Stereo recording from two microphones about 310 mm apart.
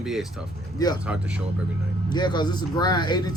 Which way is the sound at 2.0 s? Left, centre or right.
Centre.